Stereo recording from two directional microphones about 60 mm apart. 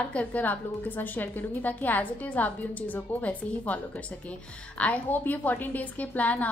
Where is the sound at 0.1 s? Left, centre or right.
Left.